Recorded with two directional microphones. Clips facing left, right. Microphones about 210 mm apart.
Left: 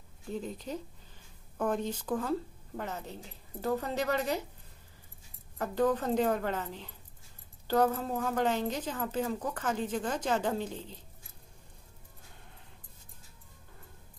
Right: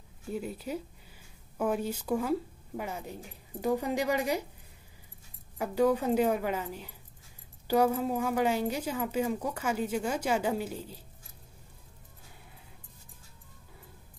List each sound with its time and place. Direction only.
0.3 s a woman's voice: 10° right (ahead or behind)
5.6 s a woman's voice: 10° right (ahead or behind)